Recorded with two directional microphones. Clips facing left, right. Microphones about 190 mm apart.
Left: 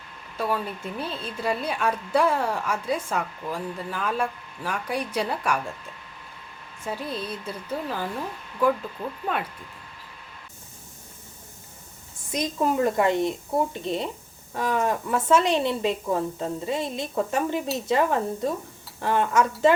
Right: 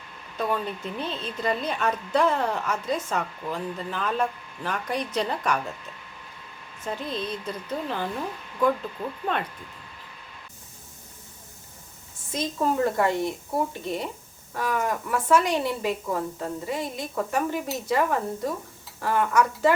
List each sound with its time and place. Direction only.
0.3 s a woman's voice: 5° left (ahead or behind)
6.8 s a woman's voice: 10° left (ahead or behind)
12.3 s a woman's voice: 15° left (ahead or behind)